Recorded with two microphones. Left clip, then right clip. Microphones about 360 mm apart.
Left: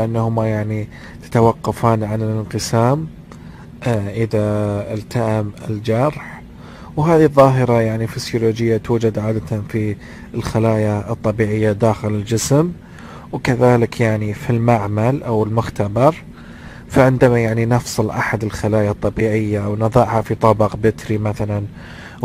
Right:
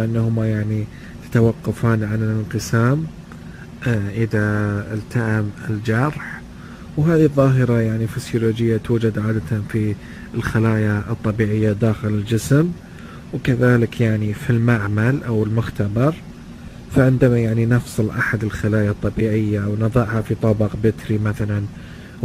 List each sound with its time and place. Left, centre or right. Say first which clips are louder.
0.0 s speech: left 5 dB; centre
7.4 s speech: left 5 dB; centre
17.4 s speech: left 4 dB; left
17.6 s speech: left 4 dB; centre